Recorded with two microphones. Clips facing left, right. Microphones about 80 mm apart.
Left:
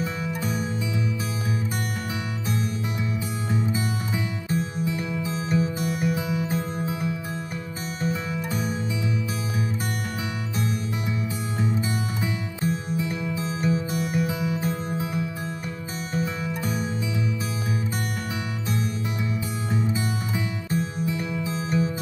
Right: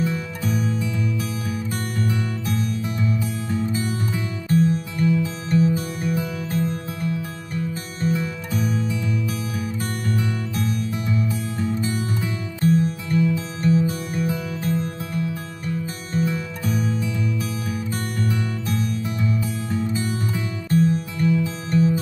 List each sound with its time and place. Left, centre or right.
0.0 s music: centre
2.4 s music: centre
10.1 s music: centre
19.7 s music: centre